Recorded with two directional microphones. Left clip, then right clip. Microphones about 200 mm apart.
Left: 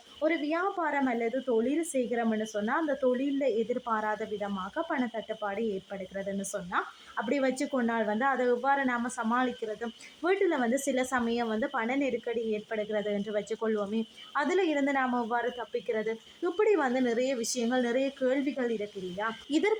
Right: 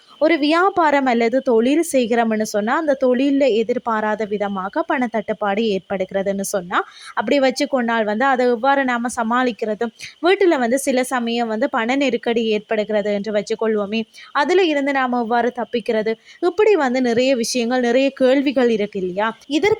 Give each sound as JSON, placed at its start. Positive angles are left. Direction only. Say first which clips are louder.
{"t": 0.2, "sound": "speech", "louder": "right 14 dB", "side_deg": -45}